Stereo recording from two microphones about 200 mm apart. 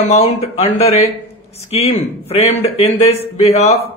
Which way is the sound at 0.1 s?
30° left (ahead or behind).